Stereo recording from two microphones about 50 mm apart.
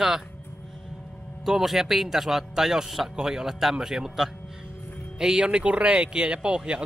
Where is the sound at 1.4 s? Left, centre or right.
Centre.